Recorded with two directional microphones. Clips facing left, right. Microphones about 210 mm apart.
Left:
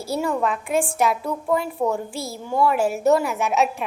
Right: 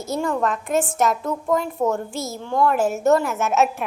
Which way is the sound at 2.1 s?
30° left (ahead or behind).